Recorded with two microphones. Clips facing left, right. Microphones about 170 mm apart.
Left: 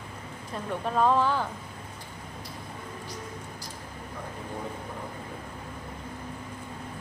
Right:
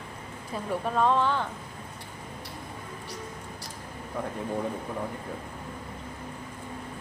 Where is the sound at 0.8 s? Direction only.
Centre (ahead or behind).